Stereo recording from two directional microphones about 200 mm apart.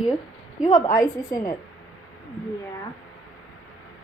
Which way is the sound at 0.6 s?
15° left (ahead or behind).